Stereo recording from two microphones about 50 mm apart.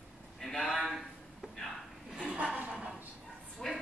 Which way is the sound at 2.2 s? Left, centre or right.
Centre.